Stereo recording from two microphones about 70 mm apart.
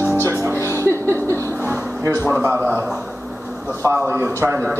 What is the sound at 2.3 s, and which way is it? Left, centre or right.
Speech, right.